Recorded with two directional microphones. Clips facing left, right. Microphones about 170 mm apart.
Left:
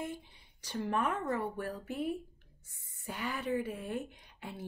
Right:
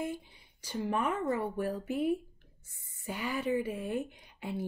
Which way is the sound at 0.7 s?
5° right (ahead or behind).